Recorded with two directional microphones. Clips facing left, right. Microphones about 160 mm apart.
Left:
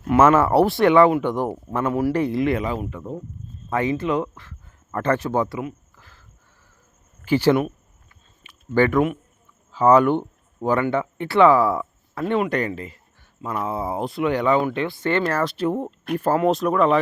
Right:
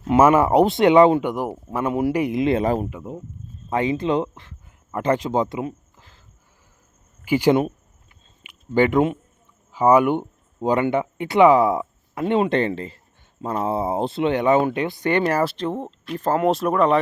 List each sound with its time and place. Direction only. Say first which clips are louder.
0.2 s speech: right 1 dB; 15° right (ahead or behind)
2.6 s speech: right 5 dB; 40° right (ahead or behind)
3.7 s speech: right 1 dB; 20° right (ahead or behind)
6.0 s a sound: even; 20° right (ahead or behind)
7.3 s speech: even; 15° right (ahead or behind)
9.7 s speech: even; 15° right (ahead or behind)
15.5 s speech: left 3 dB; 10° left (ahead or behind)